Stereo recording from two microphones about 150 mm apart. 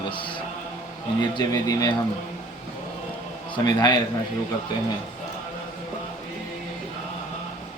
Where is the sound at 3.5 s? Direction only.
30° left (ahead or behind).